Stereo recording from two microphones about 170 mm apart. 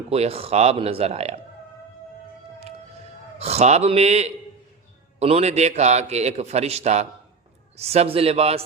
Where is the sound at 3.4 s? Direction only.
40° right (ahead or behind).